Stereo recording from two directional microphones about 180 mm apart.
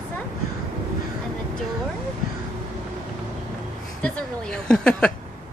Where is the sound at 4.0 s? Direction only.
5° left (ahead or behind).